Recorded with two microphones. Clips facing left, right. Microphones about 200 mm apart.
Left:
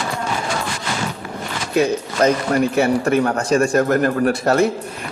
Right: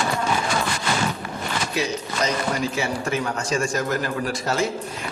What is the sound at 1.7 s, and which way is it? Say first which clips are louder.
A man's voice: left 12 dB; 55° left (ahead or behind).